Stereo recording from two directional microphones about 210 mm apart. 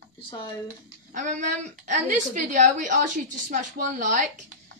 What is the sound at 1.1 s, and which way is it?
A woman's voice, 35° right (ahead or behind).